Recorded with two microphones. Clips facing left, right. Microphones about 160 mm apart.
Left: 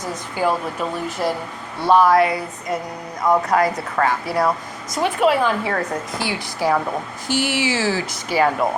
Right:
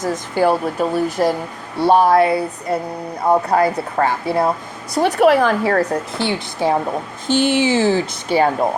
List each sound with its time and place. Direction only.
0.3 s speech: 40° right (ahead or behind)
1.8 s speech: 30° right (ahead or behind)
4.9 s speech: 40° right (ahead or behind)
6.1 s speech: 25° right (ahead or behind)
7.3 s speech: 10° left (ahead or behind)
7.7 s speech: 20° right (ahead or behind)